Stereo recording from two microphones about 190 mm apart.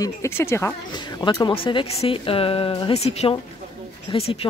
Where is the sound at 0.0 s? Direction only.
15° left (ahead or behind).